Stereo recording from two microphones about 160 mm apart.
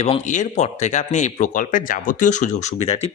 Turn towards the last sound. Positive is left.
turn(degrees=40)  # may be behind; listen again after turning